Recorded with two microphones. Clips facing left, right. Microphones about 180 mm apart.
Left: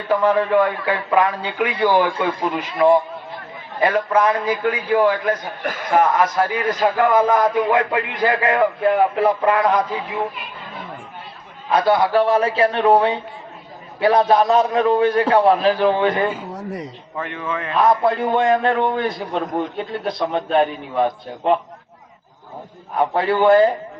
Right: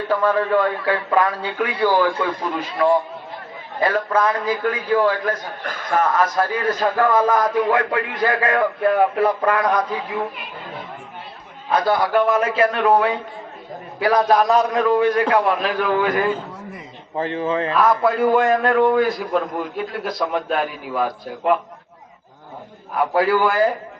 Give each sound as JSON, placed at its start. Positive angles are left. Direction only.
{"t": 0.1, "sound": "a man's voice", "side_deg": 20}
{"t": 11.9, "sound": "a man's voice", "side_deg": 30}
{"t": 17.2, "sound": "speech", "side_deg": -30}
{"t": 17.8, "sound": "a man's voice", "side_deg": 25}
{"t": 23.0, "sound": "a man's voice", "side_deg": 25}